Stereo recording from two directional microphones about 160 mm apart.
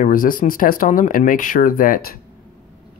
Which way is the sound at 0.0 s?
60° left (ahead or behind).